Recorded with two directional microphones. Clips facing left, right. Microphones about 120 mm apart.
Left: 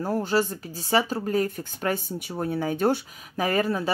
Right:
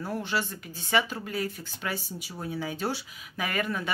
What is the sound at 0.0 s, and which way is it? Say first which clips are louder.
Speech: left 7 dB; 40° left (ahead or behind).